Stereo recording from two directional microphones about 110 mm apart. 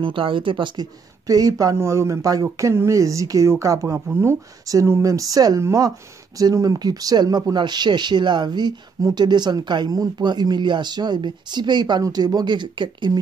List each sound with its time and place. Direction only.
0.0 s speech: 50° right (ahead or behind)
1.2 s speech: 35° right (ahead or behind)